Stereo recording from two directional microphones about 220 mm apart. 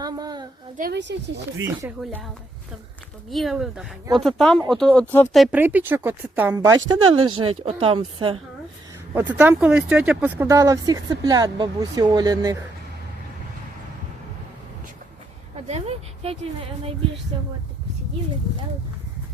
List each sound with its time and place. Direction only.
0.0 s a sound: 15° right (ahead or behind)
0.8 s speech: 50° right (ahead or behind)
1.6 s speech: 5° right (ahead or behind)
3.2 s speech: centre (ahead or behind); by 8.4 s 25° right (ahead or behind)
9.1 s speech: 10° right (ahead or behind)
15.6 s speech: 30° right (ahead or behind)